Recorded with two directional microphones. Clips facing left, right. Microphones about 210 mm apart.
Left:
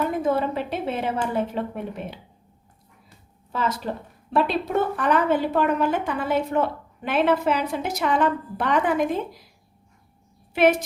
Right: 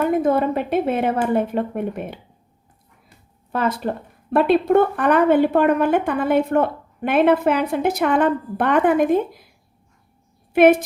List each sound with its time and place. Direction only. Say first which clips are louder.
0.0 s speech: right 5 dB; 55° right (ahead or behind)
3.5 s a woman's voice: right 5 dB; 55° right (ahead or behind)
10.5 s a woman's voice: right 6 dB; 55° right (ahead or behind)